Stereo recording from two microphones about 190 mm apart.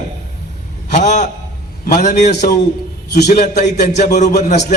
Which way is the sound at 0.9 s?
40° left (ahead or behind).